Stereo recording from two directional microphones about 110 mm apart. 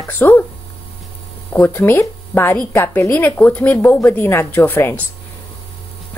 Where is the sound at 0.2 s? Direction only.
20° left (ahead or behind).